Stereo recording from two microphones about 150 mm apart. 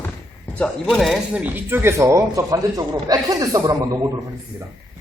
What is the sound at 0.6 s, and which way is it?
Speech, centre (ahead or behind).